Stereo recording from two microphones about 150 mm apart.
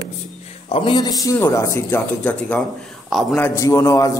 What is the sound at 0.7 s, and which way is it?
A man's voice, 35° left (ahead or behind).